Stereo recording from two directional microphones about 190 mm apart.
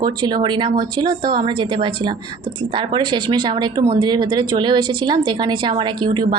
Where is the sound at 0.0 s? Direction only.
20° right (ahead or behind).